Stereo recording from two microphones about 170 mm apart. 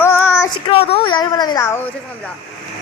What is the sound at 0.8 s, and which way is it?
Speech, 35° left (ahead or behind).